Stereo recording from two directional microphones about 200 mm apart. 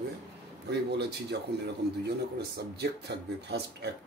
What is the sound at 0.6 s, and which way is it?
Speech, 60° right (ahead or behind).